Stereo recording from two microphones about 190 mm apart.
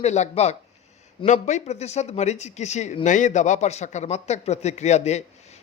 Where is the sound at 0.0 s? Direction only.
35° left (ahead or behind).